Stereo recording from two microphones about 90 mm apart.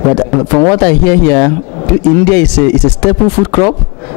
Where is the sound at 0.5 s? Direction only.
20° left (ahead or behind).